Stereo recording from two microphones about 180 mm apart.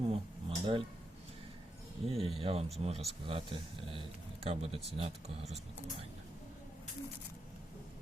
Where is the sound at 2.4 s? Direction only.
30° right (ahead or behind).